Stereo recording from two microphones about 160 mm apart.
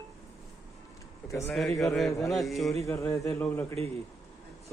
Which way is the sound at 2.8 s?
15° left (ahead or behind).